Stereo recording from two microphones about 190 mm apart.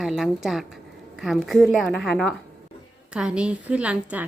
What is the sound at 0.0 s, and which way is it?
A woman's voice, centre (ahead or behind).